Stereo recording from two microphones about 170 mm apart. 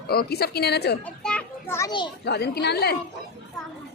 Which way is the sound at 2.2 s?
75° left (ahead or behind).